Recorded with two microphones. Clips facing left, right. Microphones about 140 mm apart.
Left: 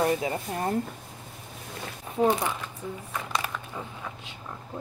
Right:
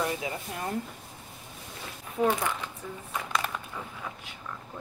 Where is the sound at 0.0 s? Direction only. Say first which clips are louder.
Left 6 dB; 40° left (ahead or behind).